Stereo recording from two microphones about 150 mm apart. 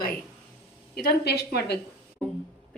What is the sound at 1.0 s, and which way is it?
Speech, 90° left.